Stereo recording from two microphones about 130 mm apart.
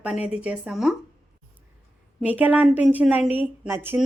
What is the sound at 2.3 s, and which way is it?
A woman's voice, 10° right (ahead or behind).